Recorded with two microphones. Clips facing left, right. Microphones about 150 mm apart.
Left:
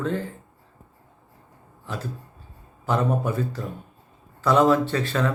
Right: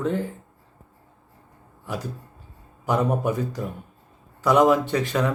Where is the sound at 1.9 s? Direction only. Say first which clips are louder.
Right 2 dB; 10° right (ahead or behind).